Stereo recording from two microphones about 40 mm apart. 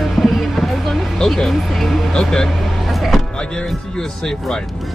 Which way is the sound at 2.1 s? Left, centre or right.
Centre.